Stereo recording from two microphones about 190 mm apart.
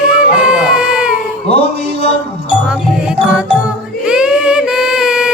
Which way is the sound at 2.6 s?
5° right (ahead or behind).